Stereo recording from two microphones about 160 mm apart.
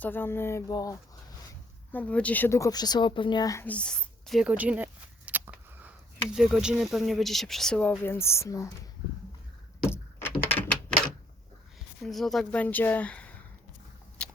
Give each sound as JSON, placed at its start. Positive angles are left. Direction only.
{"t": 0.0, "sound": "speech", "side_deg": 15}
{"t": 1.9, "sound": "speech", "side_deg": 10}
{"t": 3.7, "sound": "a sound", "side_deg": 5}
{"t": 6.3, "sound": "speech", "side_deg": -5}
{"t": 9.9, "sound": "a sound", "side_deg": 15}
{"t": 10.4, "sound": "typewriter", "side_deg": 10}
{"t": 12.0, "sound": "speech", "side_deg": 0}
{"t": 14.2, "sound": "biting", "side_deg": 5}